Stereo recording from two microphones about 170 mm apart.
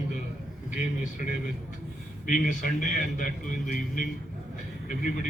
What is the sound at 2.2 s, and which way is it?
A man's voice, 50° left (ahead or behind).